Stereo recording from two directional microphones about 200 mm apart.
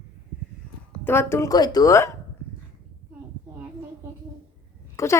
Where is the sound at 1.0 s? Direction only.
10° left (ahead or behind).